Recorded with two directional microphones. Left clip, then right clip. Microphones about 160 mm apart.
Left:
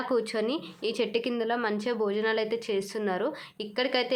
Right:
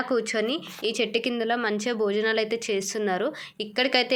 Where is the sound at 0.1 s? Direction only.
10° right (ahead or behind).